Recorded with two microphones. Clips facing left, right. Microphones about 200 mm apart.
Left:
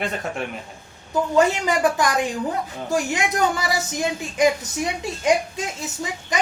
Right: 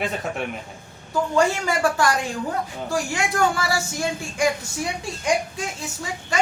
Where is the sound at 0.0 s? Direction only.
Centre (ahead or behind).